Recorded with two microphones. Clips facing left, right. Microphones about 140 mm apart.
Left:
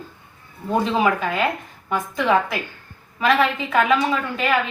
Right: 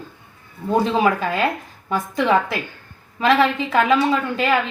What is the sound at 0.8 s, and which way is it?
Speech, 35° right (ahead or behind).